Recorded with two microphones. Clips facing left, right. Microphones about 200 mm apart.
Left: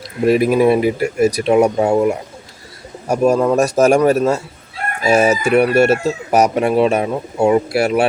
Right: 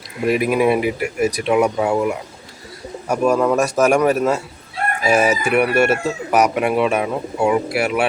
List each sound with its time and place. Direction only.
0.3 s speech: 35° left (ahead or behind)